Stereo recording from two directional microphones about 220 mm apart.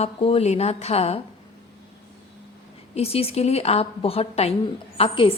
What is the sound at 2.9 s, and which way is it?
Speech, 25° left (ahead or behind).